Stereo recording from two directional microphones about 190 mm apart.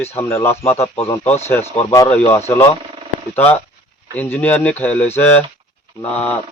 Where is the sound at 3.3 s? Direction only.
10° left (ahead or behind).